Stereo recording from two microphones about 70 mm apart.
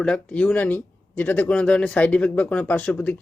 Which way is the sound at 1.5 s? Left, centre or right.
Centre.